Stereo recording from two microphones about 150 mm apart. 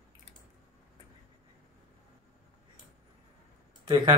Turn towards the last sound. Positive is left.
turn(degrees=-30)  # may be behind; listen again after turning